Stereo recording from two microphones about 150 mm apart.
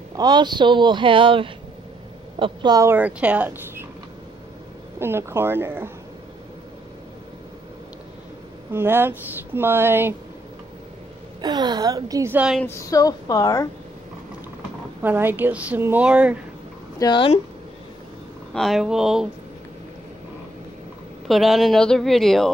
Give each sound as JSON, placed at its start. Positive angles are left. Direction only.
{"t": 0.1, "sound": "a woman's voice", "side_deg": -30}
{"t": 2.9, "sound": "speech", "side_deg": -10}
{"t": 4.9, "sound": "speech", "side_deg": -15}
{"t": 8.7, "sound": "speech", "side_deg": -15}
{"t": 11.4, "sound": "a woman's voice", "side_deg": -30}
{"t": 12.6, "sound": "a woman's voice", "side_deg": 20}
{"t": 15.0, "sound": "speech", "side_deg": -15}
{"t": 17.0, "sound": "speech", "side_deg": 30}
{"t": 18.5, "sound": "speech", "side_deg": 0}
{"t": 21.3, "sound": "speech", "side_deg": 0}